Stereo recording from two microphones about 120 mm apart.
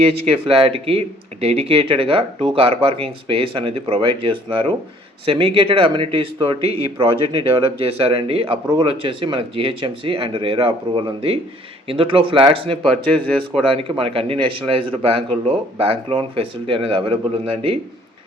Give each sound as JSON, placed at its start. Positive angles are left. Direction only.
{"t": 0.1, "sound": "speech", "side_deg": -50}
{"t": 12.9, "sound": "speech", "side_deg": 5}
{"t": 13.6, "sound": "speech", "side_deg": -50}